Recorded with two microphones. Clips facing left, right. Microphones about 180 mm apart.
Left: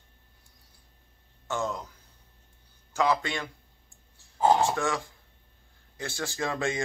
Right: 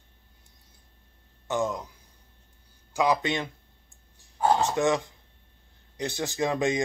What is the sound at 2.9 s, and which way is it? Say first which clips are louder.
Speech: right 2 dB; 15° right (ahead or behind).